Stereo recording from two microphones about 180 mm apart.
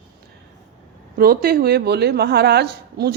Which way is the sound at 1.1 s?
55° right (ahead or behind).